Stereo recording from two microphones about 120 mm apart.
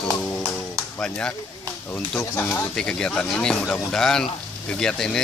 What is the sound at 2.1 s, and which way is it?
Speech, 15° left (ahead or behind).